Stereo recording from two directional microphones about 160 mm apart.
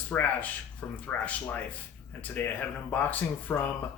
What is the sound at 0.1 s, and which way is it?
Speech, 10° left (ahead or behind).